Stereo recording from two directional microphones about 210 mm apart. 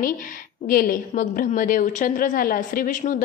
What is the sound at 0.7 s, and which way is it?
A woman's voice, 40° left (ahead or behind).